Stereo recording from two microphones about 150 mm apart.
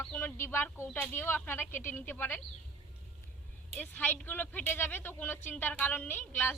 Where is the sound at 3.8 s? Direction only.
10° left (ahead or behind).